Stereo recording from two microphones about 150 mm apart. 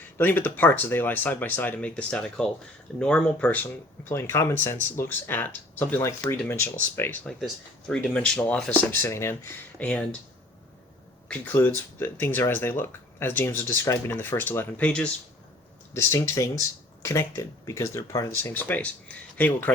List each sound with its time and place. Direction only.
0.2 s speech: 15° left (ahead or behind)
11.3 s speech: 15° left (ahead or behind)
16.0 s speech: 20° left (ahead or behind)